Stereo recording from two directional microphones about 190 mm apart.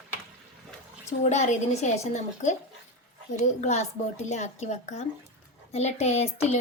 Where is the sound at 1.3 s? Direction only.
40° left (ahead or behind).